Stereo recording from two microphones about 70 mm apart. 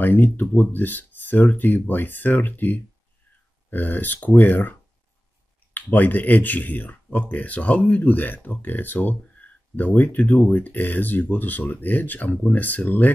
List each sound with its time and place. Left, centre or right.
0.0 s speech: left
5.8 s speech: left